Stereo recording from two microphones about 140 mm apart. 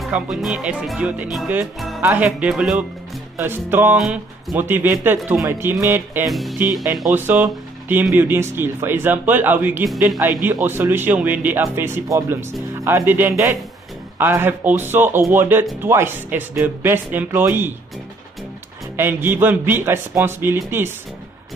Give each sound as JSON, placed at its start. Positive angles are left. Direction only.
{"t": 0.0, "sound": "speech", "side_deg": 0}
{"t": 3.3, "sound": "speech", "side_deg": -15}
{"t": 4.0, "sound": "speech", "side_deg": -5}
{"t": 4.6, "sound": "speech", "side_deg": -15}
{"t": 6.2, "sound": "speech", "side_deg": 0}
{"t": 7.2, "sound": "speech", "side_deg": -15}
{"t": 18.9, "sound": "speech", "side_deg": -15}